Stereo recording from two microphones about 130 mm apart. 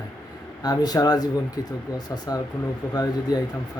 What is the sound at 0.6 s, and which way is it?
Speech, 30° left (ahead or behind).